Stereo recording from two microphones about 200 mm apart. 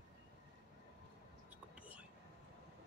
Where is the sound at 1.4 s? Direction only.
10° right (ahead or behind).